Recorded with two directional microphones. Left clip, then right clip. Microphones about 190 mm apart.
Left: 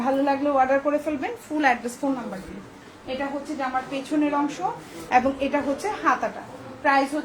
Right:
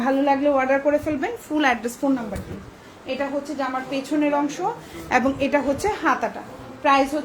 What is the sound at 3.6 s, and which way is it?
A woman's voice, 45° right (ahead or behind).